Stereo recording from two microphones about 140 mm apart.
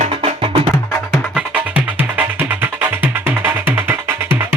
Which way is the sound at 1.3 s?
10° right (ahead or behind).